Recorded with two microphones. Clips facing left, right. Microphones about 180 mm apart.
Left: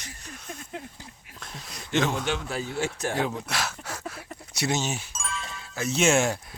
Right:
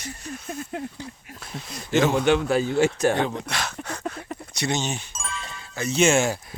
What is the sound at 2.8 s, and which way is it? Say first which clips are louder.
Speech: right 7 dB; 75° right (ahead or behind).